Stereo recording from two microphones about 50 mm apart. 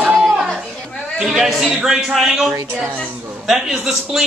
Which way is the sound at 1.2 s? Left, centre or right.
Centre.